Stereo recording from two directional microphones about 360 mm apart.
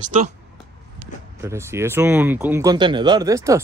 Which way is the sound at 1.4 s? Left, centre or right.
Centre.